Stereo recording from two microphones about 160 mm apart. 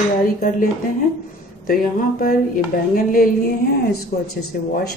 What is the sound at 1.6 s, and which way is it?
A woman's voice, 60° left (ahead or behind).